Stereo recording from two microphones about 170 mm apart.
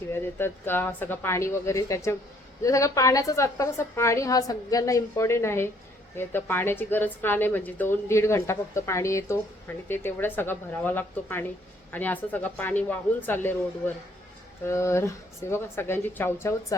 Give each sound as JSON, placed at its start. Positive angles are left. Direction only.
{"t": 0.1, "sound": "a woman's voice", "side_deg": 15}